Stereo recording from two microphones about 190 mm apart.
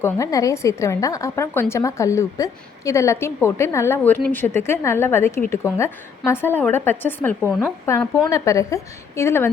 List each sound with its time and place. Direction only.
0.0 s a woman's voice: 15° left (ahead or behind)